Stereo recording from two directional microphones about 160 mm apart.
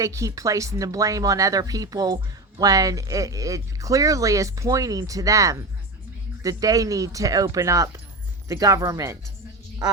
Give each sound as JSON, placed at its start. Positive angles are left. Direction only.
{"t": 0.0, "sound": "speech", "side_deg": -20}